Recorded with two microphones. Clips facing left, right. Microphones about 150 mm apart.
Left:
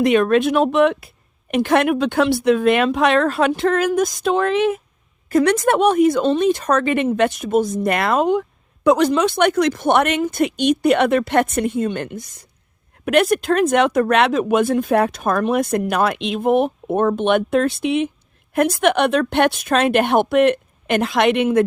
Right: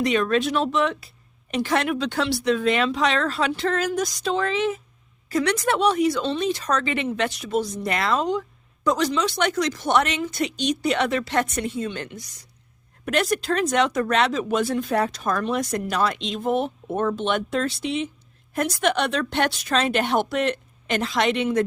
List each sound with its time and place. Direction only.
0.0 s speech: 55° left (ahead or behind)